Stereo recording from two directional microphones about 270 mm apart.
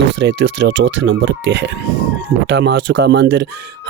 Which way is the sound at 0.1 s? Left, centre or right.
Right.